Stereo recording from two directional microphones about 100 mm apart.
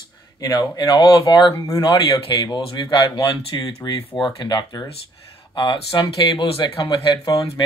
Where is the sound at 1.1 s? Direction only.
60° left (ahead or behind).